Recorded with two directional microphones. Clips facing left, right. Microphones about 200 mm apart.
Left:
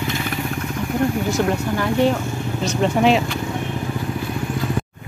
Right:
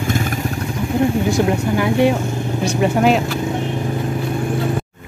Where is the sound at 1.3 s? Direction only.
15° right (ahead or behind).